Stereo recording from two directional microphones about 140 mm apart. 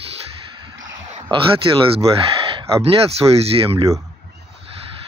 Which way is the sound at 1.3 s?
40° right (ahead or behind).